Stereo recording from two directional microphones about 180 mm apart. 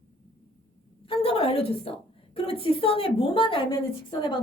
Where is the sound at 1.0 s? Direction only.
30° left (ahead or behind).